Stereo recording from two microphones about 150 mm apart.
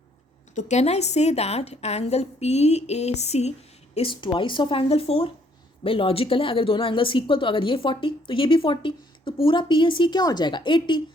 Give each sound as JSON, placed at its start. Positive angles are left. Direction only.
{"t": 0.5, "sound": "a woman's voice", "side_deg": 50}
{"t": 3.9, "sound": "speech", "side_deg": 35}